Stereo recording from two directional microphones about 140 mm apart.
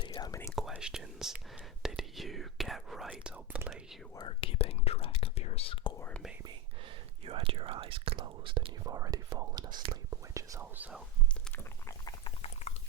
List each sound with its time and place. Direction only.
0.0 s whispering: 30° left (ahead or behind)
0.7 s speech: 5° right (ahead or behind)
4.1 s speech: 35° left (ahead or behind)
6.0 s speech: 10° left (ahead or behind)
7.3 s speech: 40° right (ahead or behind)
8.8 s speech: 25° right (ahead or behind)
10.1 s whispering: 20° right (ahead or behind)
11.5 s a sound: 20° left (ahead or behind)
12.2 s a sound: 45° left (ahead or behind)